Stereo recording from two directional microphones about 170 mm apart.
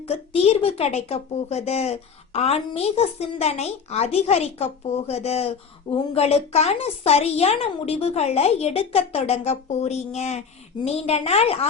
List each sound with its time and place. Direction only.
0.1 s a woman's voice: 35° left (ahead or behind)